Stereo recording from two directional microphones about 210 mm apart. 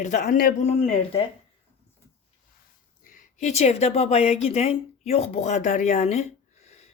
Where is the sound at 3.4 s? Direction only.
30° left (ahead or behind).